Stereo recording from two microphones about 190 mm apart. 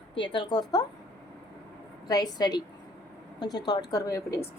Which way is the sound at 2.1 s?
20° left (ahead or behind).